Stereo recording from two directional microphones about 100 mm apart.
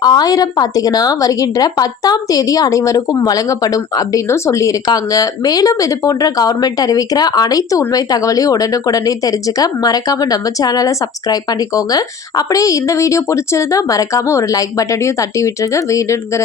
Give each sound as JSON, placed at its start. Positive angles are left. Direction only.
{"t": 0.0, "sound": "speech", "side_deg": 40}